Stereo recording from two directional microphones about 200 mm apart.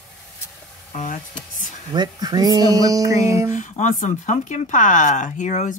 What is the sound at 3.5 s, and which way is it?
Speech, 40° left (ahead or behind).